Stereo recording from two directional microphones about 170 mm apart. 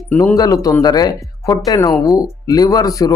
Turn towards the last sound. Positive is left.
turn(degrees=20)  # may be behind; listen again after turning